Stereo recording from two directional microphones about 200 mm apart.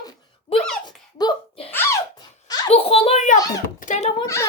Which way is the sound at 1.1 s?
25° left (ahead or behind).